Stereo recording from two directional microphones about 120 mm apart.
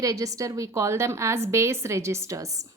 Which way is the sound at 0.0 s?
30° right (ahead or behind).